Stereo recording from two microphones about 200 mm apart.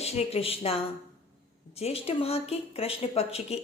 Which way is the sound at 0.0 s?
30° left (ahead or behind).